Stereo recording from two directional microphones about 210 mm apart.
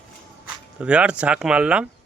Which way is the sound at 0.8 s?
5° right (ahead or behind).